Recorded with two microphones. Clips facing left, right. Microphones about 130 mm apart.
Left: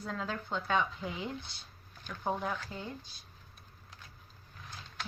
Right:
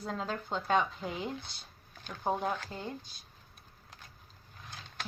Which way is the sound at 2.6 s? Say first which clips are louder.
Right 1 dB; 40° right (ahead or behind).